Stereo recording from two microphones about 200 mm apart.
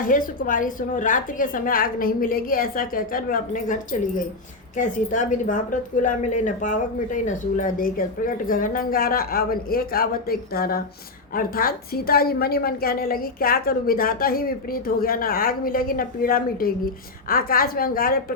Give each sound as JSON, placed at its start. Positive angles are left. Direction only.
{"t": 0.0, "sound": "a woman's voice", "side_deg": 45}
{"t": 4.8, "sound": "a woman's voice", "side_deg": 40}